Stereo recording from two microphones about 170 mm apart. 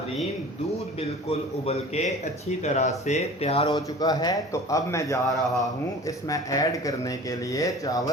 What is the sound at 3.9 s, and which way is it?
Speech, 20° left (ahead or behind).